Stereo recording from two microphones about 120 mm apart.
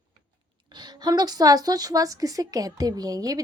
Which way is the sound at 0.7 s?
35° right (ahead or behind).